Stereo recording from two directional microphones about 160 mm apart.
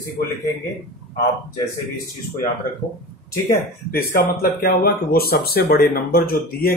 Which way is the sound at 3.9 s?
70° left (ahead or behind).